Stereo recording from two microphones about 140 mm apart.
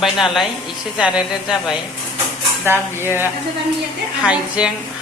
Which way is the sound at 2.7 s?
15° right (ahead or behind).